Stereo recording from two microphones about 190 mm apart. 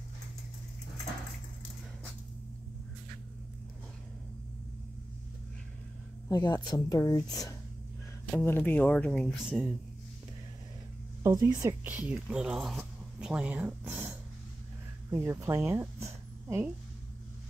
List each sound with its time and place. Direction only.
6.2 s speech: 20° left (ahead or behind); by 9.7 s centre (ahead or behind)
11.2 s speech: 20° right (ahead or behind)